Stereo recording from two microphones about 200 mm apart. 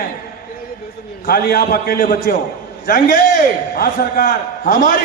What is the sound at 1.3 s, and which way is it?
A man's voice, 50° left (ahead or behind).